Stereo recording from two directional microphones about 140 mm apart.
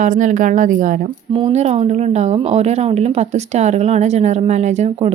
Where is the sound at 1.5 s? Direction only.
50° right (ahead or behind).